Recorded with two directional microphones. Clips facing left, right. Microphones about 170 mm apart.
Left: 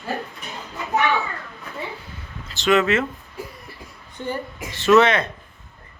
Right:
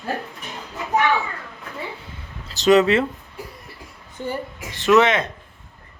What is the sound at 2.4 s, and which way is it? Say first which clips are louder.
Speech: right 4 dB; 40° right (ahead or behind).